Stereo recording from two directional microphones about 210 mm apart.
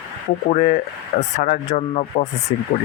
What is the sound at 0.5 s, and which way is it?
Speech, 35° left (ahead or behind).